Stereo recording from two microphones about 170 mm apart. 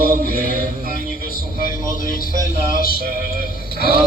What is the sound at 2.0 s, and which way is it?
Speech, 55° left (ahead or behind).